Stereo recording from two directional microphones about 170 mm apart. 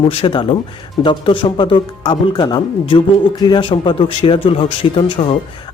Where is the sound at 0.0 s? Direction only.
35° left (ahead or behind).